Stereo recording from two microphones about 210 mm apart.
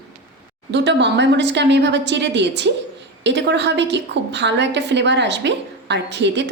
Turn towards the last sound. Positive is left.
turn(degrees=-55)  # may be behind; listen again after turning